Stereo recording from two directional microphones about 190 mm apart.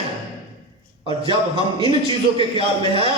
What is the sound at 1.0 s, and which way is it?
A man's voice, 25° right (ahead or behind).